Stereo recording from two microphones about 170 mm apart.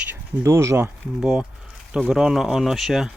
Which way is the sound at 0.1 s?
15° right (ahead or behind).